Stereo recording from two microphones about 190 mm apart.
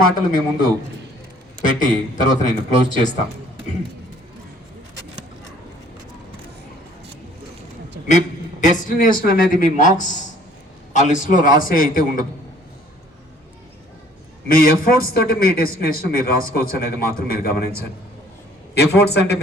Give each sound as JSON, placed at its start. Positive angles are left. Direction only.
{"t": 0.0, "sound": "a man's voice", "side_deg": 50}
{"t": 8.6, "sound": "a man's voice", "side_deg": 45}
{"t": 14.4, "sound": "a man's voice", "side_deg": 50}